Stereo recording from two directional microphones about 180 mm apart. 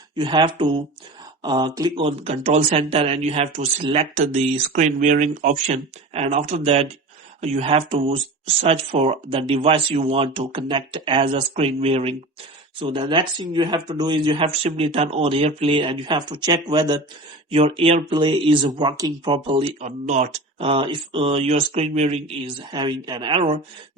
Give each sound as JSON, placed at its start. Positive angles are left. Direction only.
{"t": 0.2, "sound": "speech", "side_deg": -25}
{"t": 17.5, "sound": "speech", "side_deg": -35}